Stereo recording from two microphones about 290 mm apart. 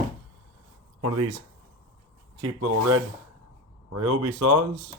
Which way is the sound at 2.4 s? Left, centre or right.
Right.